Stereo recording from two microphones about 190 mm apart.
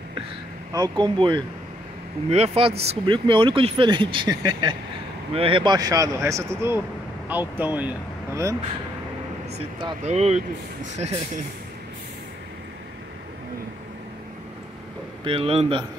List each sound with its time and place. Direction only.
0.7 s speech: 20° right (ahead or behind)
9.8 s speech: 30° right (ahead or behind)
15.2 s speech: 30° right (ahead or behind)